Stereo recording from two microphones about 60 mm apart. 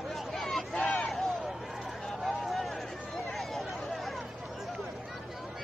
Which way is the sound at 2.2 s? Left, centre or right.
Centre.